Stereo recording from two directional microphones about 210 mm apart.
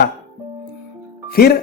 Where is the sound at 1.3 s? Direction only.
45° left (ahead or behind).